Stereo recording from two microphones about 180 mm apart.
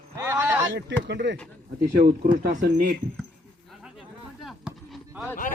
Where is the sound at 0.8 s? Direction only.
75° right (ahead or behind).